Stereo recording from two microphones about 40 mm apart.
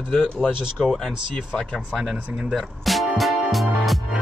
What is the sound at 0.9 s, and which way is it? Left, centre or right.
Speech, centre.